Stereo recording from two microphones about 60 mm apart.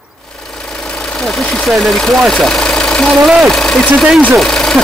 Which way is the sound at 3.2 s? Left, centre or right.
Centre.